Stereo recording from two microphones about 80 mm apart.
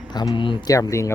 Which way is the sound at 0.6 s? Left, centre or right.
Left.